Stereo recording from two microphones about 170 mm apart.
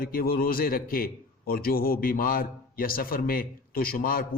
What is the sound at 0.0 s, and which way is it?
A man's voice, 60° left (ahead or behind).